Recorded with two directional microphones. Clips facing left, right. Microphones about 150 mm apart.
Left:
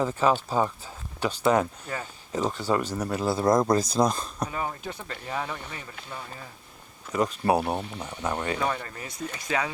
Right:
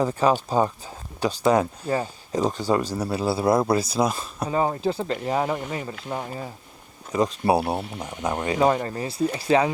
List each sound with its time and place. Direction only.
0.0 s speech: 15° right (ahead or behind)
1.9 s speech: 35° right (ahead or behind)
2.3 s speech: 15° right (ahead or behind)
4.4 s speech: 30° right (ahead or behind)
7.1 s speech: 15° right (ahead or behind)
8.5 s speech: 35° right (ahead or behind)